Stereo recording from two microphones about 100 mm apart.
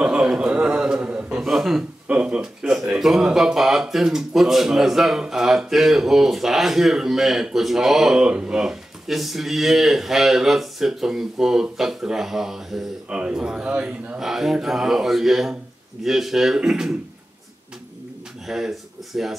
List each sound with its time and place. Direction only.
0.0 s a man's voice: 5° right (ahead or behind)
18.5 s speech: 5° right (ahead or behind)